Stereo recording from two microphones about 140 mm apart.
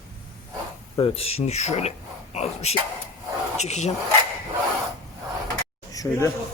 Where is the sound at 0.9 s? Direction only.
40° left (ahead or behind).